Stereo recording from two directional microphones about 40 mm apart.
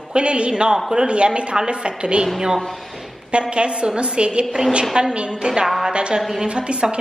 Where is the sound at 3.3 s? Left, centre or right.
Right.